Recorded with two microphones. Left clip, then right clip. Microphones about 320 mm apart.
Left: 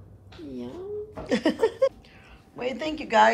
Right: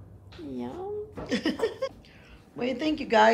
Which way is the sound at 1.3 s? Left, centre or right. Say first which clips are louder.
Left 5 dB; centre.